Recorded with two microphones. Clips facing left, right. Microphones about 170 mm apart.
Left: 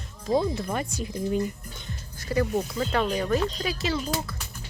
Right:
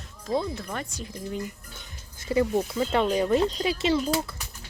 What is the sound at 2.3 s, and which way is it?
A woman's voice, 20° right (ahead or behind).